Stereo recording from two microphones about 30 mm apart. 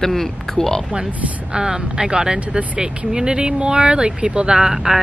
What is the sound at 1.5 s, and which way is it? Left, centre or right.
Speech, right.